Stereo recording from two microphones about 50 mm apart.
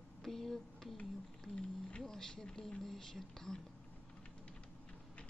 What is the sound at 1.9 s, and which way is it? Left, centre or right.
Speech, centre.